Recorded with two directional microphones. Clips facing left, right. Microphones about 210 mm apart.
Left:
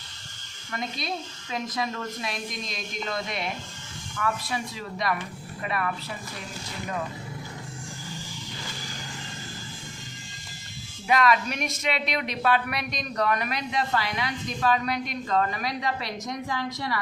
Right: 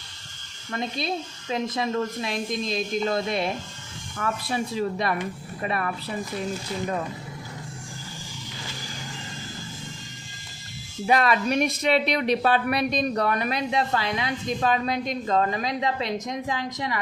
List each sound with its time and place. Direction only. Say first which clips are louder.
0.7 s a woman's voice: right 4 dB; 30° right (ahead or behind)
5.6 s a woman's voice: right 2 dB; 35° right (ahead or behind)
11.0 s a woman's voice: right 1 dB; 30° right (ahead or behind)